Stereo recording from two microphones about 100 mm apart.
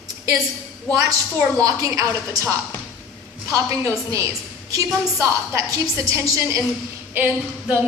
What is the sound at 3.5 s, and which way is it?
A woman's voice, 30° right (ahead or behind).